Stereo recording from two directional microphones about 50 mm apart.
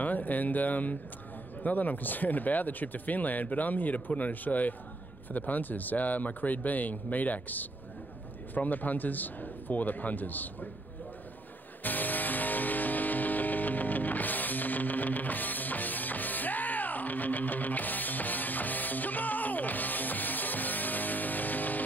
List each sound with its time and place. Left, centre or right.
0.0 s speech: left
11.8 s music: left